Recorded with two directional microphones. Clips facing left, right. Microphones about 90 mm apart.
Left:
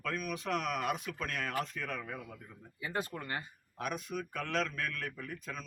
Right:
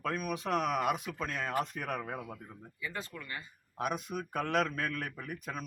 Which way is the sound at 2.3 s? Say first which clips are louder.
Right 4 dB; 35° right (ahead or behind).